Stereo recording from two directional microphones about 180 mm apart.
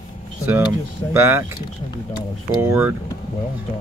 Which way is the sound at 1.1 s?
15° right (ahead or behind).